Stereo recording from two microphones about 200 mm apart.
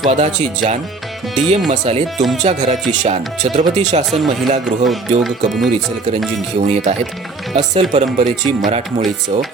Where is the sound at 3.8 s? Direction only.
35° right (ahead or behind).